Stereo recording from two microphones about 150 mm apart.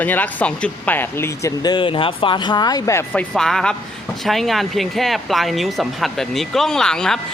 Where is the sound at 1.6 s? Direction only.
30° left (ahead or behind).